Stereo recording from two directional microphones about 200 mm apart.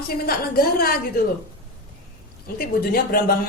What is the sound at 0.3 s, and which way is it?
Speech, 50° left (ahead or behind).